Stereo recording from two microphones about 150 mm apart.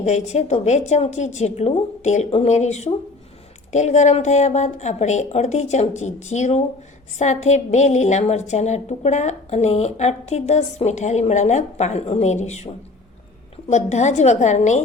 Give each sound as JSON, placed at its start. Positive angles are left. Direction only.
{"t": 0.0, "sound": "a woman's voice", "side_deg": 50}